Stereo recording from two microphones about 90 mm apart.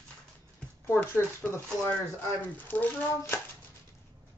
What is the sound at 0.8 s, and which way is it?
Speech, 25° left (ahead or behind).